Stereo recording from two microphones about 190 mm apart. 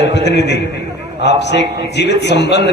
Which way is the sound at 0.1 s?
65° left (ahead or behind).